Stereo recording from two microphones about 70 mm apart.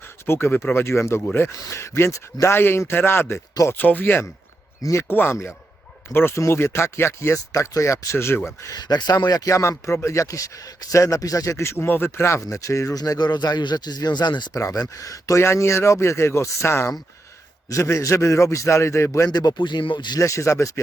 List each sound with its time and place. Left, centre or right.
0.3 s speech: left
4.8 s speech: left
5.0 s speech: left
8.4 s speech: left
9.5 s speech: left
14.5 s speech: left
15.4 s speech: left
19.3 s speech: left
20.1 s speech: left